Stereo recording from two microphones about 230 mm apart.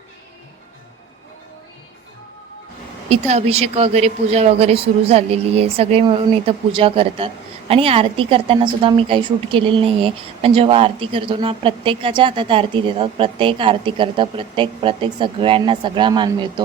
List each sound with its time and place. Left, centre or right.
3.1 s a woman's voice: right